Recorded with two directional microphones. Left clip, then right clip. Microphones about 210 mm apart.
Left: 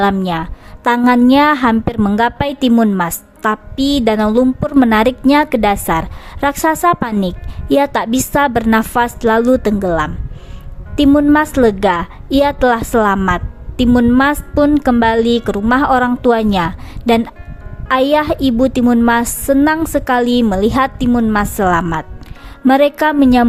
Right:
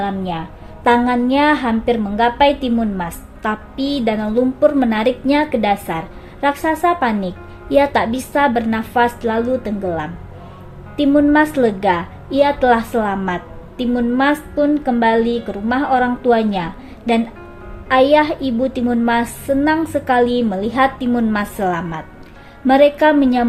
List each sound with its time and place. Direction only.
0.0 s a woman's voice: 45° left (ahead or behind)